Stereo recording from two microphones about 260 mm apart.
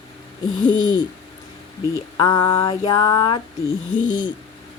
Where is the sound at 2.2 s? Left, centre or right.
Centre.